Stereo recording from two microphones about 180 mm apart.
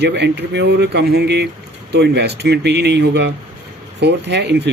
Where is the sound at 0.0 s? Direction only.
70° right (ahead or behind).